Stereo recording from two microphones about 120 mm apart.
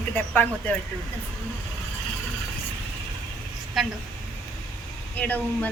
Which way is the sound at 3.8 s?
Centre (ahead or behind).